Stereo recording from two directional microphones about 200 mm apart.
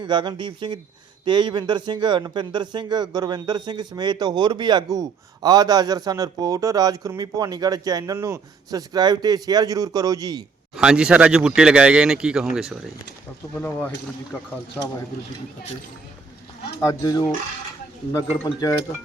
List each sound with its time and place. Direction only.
0.0 s a man's voice: 20° right (ahead or behind)
10.8 s speech: 5° right (ahead or behind)
13.6 s speech: 10° left (ahead or behind)
16.8 s speech: 20° left (ahead or behind)
18.3 s speech: 15° left (ahead or behind)